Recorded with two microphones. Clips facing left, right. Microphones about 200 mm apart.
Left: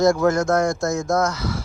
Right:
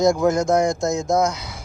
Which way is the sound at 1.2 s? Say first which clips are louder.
Even; 15° right (ahead or behind).